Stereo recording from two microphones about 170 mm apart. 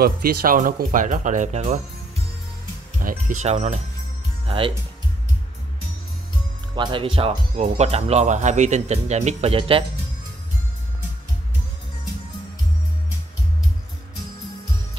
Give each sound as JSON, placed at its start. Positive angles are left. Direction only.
{"t": 0.0, "sound": "speech", "side_deg": -60}
{"t": 3.0, "sound": "music", "side_deg": -55}
{"t": 3.4, "sound": "speech", "side_deg": -40}
{"t": 6.7, "sound": "speech", "side_deg": -30}